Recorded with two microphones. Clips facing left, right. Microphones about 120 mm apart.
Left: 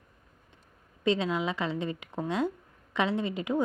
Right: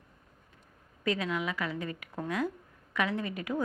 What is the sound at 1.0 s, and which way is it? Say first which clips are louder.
A woman's voice: left 4 dB; 25° left (ahead or behind).